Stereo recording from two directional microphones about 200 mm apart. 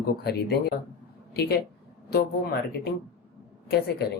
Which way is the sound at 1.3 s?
55° left (ahead or behind).